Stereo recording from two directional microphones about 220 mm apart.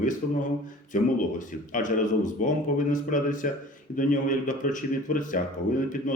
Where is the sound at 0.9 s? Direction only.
35° left (ahead or behind).